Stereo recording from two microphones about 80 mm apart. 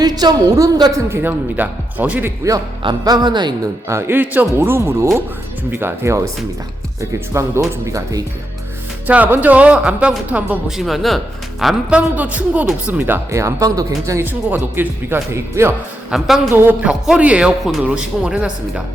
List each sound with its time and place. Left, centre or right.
0.0 s a woman's voice: right
1.1 s speech: right
3.0 s speech: right
3.8 s a woman's voice: right
9.0 s speech: centre
10.8 s speech: centre
11.9 s speech: centre
13.3 s a woman's voice: right
14.2 s speech: right
16.0 s speech: centre